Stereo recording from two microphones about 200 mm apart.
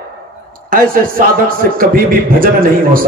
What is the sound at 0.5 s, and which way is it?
A man's voice, 45° right (ahead or behind).